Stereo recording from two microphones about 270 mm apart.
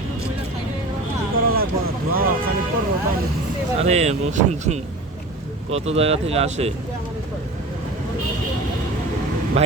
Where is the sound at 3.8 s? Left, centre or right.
Right.